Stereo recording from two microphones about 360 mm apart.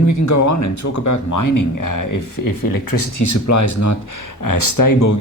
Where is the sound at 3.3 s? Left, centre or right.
Left.